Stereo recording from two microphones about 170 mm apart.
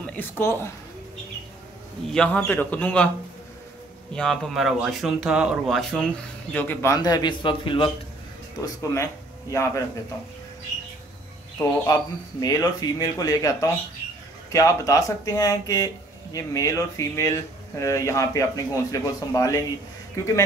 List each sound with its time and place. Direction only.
0.0 s speech: 10° left (ahead or behind)
2.1 s a man's voice: 10° left (ahead or behind)
4.1 s speech: 5° left (ahead or behind); by 7.9 s 30° left (ahead or behind)
8.5 s speech: 20° left (ahead or behind)
11.9 s a man's voice: 20° left (ahead or behind)